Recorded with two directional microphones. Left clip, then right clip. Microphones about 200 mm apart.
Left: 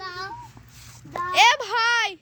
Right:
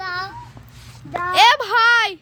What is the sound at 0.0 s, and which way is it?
Babbling, 5° right (ahead or behind).